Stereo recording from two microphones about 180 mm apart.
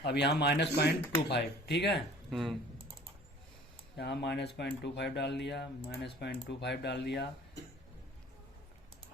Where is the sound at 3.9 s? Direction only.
70° left (ahead or behind).